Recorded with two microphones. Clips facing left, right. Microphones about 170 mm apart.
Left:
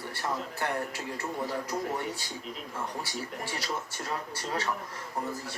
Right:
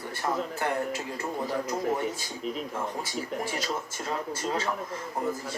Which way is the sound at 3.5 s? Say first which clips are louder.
Right 3 dB; 20° right (ahead or behind).